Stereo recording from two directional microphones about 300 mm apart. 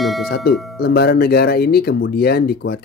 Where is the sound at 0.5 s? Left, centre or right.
Left.